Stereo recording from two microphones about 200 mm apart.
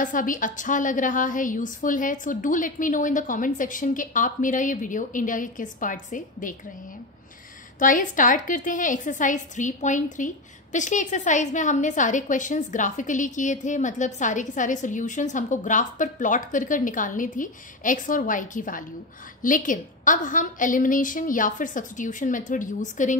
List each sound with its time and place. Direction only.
0.0 s a woman's voice: 40° left (ahead or behind)
7.8 s a woman's voice: 40° left (ahead or behind)